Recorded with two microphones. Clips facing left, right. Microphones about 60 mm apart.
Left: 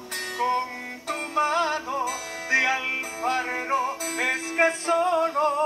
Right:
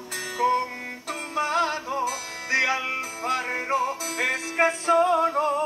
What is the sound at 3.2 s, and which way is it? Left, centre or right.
Music, centre.